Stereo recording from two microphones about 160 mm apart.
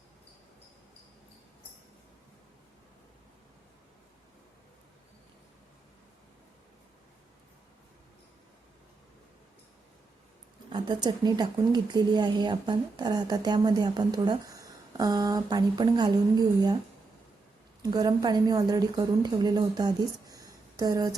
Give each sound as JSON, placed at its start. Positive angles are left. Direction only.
{"t": 10.7, "sound": "speech", "side_deg": -30}
{"t": 17.9, "sound": "speech", "side_deg": -25}